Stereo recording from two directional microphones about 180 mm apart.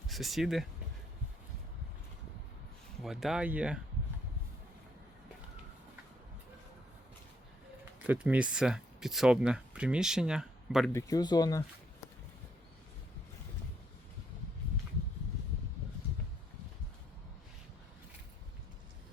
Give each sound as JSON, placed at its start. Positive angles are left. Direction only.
{"t": 0.1, "sound": "speech", "side_deg": 0}
{"t": 3.0, "sound": "speech", "side_deg": 0}
{"t": 8.0, "sound": "speech", "side_deg": -10}
{"t": 10.9, "sound": "speech", "side_deg": 20}